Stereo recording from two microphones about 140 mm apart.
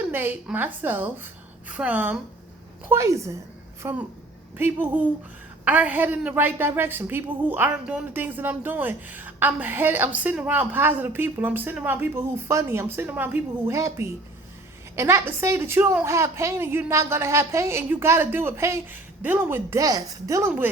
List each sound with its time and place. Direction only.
0.1 s a woman's voice: 15° right (ahead or behind)